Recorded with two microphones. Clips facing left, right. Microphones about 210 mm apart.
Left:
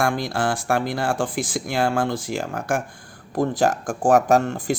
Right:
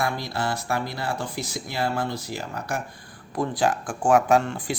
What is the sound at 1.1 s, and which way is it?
Speech, 90° left.